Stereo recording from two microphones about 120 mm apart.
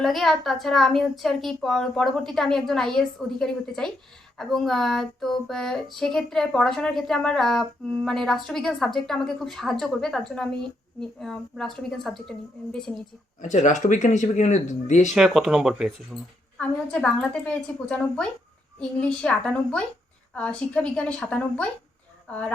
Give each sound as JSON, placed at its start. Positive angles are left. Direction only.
{"t": 0.0, "sound": "speech", "side_deg": 0}
{"t": 13.4, "sound": "speech", "side_deg": 90}
{"t": 15.1, "sound": "a woman's voice", "side_deg": -5}